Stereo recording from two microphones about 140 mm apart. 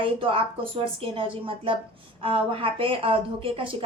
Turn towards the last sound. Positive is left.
turn(degrees=-40)  # may be behind; listen again after turning